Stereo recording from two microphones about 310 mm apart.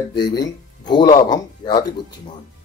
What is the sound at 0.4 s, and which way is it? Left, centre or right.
Speech, centre.